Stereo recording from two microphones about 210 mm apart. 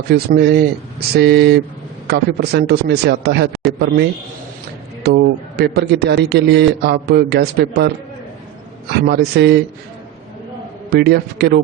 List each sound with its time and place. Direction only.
0.1 s a man's voice: 50° right (ahead or behind)
5.0 s a man's voice: 50° right (ahead or behind)
9.0 s a man's voice: 50° right (ahead or behind)
10.8 s a man's voice: 50° right (ahead or behind)